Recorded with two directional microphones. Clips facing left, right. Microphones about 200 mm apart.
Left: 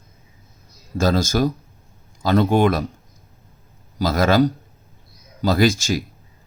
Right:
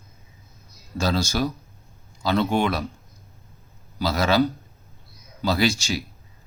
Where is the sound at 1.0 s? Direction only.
50° left (ahead or behind).